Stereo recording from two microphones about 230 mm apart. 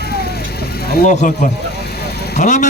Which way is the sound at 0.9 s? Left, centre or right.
Left.